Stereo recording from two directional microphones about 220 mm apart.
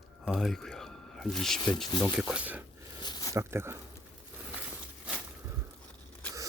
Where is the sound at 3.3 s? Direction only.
10° right (ahead or behind).